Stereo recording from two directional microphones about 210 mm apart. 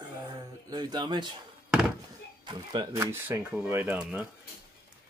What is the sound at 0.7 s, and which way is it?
Speech, 20° right (ahead or behind).